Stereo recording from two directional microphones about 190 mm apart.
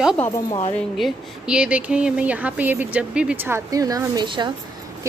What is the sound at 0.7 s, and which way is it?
Speech, 5° left (ahead or behind).